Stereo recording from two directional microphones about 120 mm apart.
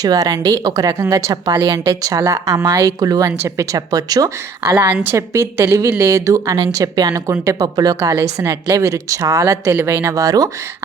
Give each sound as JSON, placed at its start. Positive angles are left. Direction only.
{"t": 0.0, "sound": "a woman's voice", "side_deg": -30}
{"t": 4.8, "sound": "speech", "side_deg": -20}